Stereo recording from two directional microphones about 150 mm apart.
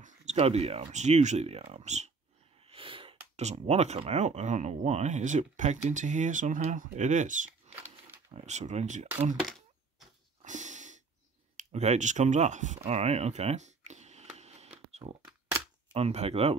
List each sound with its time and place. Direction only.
0.0 s speech: 50° right (ahead or behind)
2.6 s sneeze: 35° right (ahead or behind)
3.3 s speech: 50° right (ahead or behind)
9.4 s a sound: centre (ahead or behind)
10.4 s snort: 55° right (ahead or behind)
11.5 s speech: 50° right (ahead or behind)
14.9 s a sound: 45° right (ahead or behind)
15.9 s speech: 45° right (ahead or behind)